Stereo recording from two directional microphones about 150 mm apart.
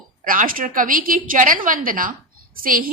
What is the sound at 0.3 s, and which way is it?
A woman's voice, 65° right (ahead or behind).